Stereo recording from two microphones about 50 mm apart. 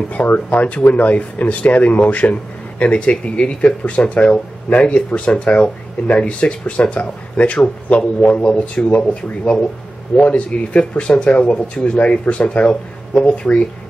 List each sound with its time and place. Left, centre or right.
0.1 s speech: left